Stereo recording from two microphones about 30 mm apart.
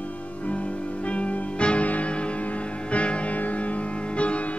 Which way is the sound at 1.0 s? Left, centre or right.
Left.